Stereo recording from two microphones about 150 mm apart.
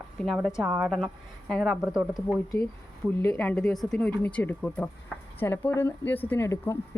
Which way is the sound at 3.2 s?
10° left (ahead or behind).